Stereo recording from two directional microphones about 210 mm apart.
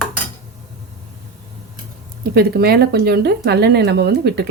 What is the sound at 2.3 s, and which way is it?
Speech, 50° right (ahead or behind).